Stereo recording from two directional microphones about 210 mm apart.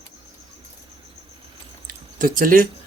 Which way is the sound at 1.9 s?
40° right (ahead or behind).